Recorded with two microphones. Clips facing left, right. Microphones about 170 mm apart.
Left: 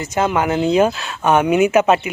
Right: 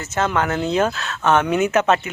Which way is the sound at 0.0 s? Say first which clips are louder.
Left 3 dB; 10° left (ahead or behind).